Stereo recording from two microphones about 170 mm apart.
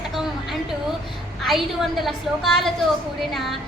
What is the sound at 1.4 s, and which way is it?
A woman's voice, centre (ahead or behind).